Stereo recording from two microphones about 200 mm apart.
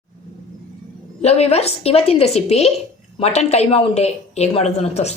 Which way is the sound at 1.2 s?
30° left (ahead or behind).